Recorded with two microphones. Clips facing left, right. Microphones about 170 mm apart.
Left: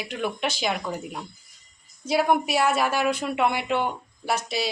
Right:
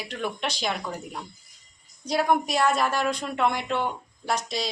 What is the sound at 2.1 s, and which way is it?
A woman's voice, 5° left (ahead or behind).